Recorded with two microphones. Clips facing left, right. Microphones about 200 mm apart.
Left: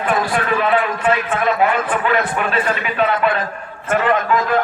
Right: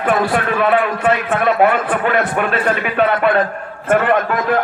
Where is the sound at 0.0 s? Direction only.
55° right (ahead or behind).